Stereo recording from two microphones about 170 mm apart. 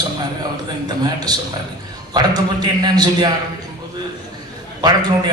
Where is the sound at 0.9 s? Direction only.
25° right (ahead or behind).